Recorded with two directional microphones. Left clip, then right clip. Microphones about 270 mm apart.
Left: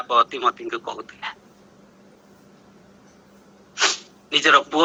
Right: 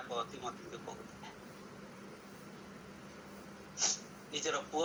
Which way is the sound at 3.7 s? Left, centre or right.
Left.